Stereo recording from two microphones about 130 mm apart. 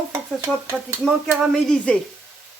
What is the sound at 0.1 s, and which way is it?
Stir, 20° right (ahead or behind).